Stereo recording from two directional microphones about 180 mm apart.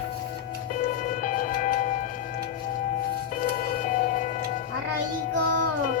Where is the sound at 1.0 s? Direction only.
45° left (ahead or behind).